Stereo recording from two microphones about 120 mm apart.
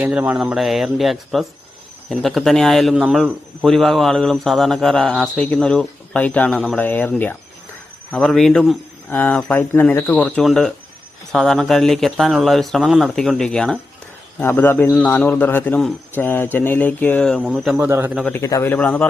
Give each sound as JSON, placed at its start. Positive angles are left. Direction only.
{"t": 0.0, "sound": "speech", "side_deg": -10}
{"t": 8.1, "sound": "speech", "side_deg": 5}
{"t": 9.0, "sound": "speech", "side_deg": 15}
{"t": 17.4, "sound": "speech", "side_deg": -5}
{"t": 17.7, "sound": "speech", "side_deg": -20}
{"t": 18.3, "sound": "a man's voice", "side_deg": 25}
{"t": 18.7, "sound": "speech", "side_deg": 10}